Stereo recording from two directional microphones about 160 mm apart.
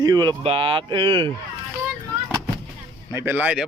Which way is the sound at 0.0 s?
25° right (ahead or behind).